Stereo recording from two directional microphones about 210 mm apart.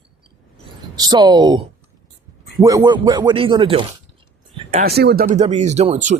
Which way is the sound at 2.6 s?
20° right (ahead or behind).